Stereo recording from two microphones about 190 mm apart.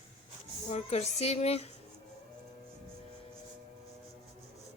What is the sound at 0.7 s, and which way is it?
Speech, 35° left (ahead or behind).